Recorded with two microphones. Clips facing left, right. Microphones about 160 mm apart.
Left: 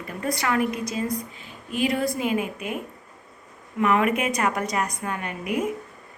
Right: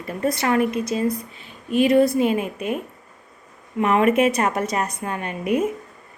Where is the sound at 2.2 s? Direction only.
30° right (ahead or behind).